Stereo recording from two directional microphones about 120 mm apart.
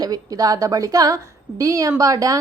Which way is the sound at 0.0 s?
30° right (ahead or behind).